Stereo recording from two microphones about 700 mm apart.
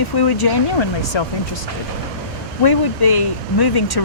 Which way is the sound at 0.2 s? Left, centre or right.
Left.